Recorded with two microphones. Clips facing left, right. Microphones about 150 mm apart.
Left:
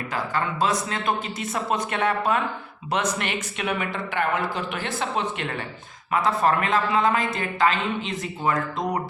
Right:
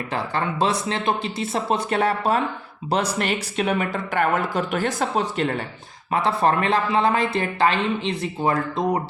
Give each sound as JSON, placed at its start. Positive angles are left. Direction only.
{"t": 0.1, "sound": "a man's voice", "side_deg": -30}